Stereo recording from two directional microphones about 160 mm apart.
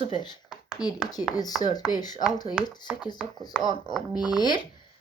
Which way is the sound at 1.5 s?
Centre (ahead or behind).